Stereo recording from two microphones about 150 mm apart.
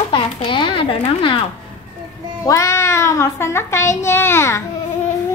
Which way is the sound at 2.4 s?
20° left (ahead or behind).